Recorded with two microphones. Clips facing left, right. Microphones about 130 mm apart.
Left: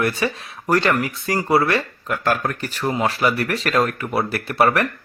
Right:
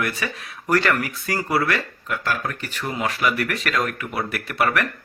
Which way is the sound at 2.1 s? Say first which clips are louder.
Left 5 dB; 45° left (ahead or behind).